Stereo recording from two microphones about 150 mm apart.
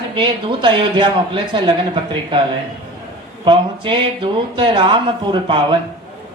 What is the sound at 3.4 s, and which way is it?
Speech, 35° right (ahead or behind).